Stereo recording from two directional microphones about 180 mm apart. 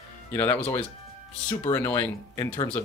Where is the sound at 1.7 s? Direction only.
15° left (ahead or behind).